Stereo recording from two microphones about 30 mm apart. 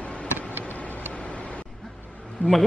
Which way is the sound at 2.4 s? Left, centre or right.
Left.